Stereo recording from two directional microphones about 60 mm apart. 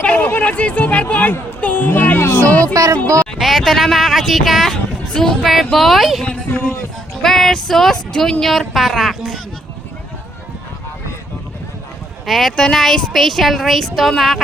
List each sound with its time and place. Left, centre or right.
0.0 s speech: left
2.7 s speech: right
3.3 s speech: centre
4.7 s speech: centre
12.2 s speech: centre